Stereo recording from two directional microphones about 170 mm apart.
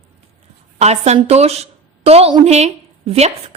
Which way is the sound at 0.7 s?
40° right (ahead or behind).